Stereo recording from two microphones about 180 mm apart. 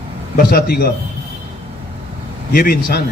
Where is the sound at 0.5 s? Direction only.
60° left (ahead or behind).